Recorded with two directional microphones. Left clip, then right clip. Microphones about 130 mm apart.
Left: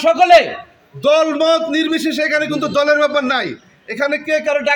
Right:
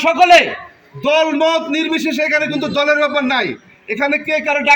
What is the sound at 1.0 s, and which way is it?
A man's voice, 35° left (ahead or behind).